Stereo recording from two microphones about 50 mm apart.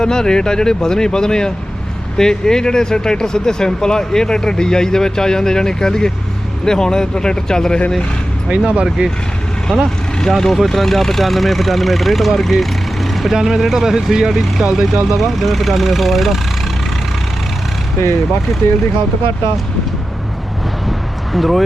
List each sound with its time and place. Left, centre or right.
0.0 s speech: centre
8.4 s speech: right
10.2 s speech: centre
21.3 s speech: centre